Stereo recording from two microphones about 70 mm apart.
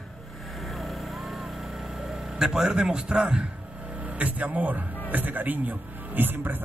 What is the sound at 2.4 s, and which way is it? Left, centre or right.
A man's voice, centre.